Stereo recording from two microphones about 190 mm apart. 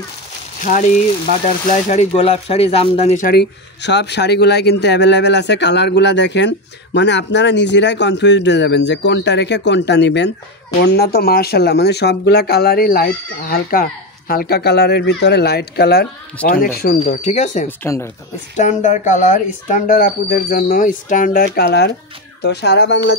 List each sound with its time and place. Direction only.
0.6 s speech: 45° left (ahead or behind)
3.3 s speech: 60° left (ahead or behind)
17.0 s speech: 40° left (ahead or behind)
17.6 s speech: 15° left (ahead or behind)
18.6 s speech: 40° left (ahead or behind)
21.5 s speech: 60° left (ahead or behind)